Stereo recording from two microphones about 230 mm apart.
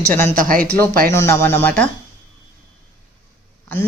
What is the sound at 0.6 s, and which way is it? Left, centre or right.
Speech, centre.